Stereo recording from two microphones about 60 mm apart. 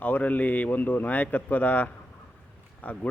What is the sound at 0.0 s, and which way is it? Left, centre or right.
Speech, left.